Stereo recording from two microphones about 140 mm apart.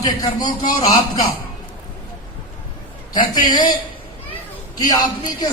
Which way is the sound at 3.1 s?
35° left (ahead or behind).